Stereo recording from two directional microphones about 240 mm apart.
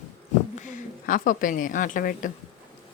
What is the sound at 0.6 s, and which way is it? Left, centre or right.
Speech, left.